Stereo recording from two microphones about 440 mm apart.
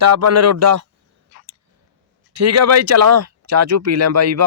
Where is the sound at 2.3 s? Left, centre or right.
Right.